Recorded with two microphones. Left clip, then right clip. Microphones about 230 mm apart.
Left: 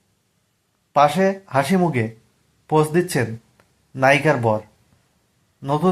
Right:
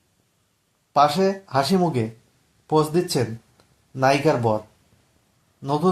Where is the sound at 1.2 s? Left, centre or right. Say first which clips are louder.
Left 2 dB; centre.